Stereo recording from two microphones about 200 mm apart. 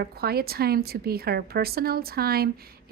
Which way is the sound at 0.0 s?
50° right (ahead or behind).